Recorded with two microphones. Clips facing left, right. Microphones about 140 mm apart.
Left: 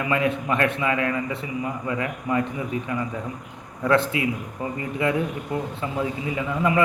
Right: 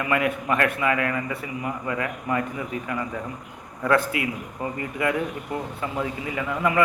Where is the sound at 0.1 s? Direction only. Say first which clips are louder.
Even; 25° left (ahead or behind).